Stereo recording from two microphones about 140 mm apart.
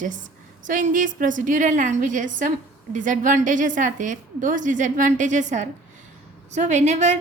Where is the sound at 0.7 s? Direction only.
65° right (ahead or behind).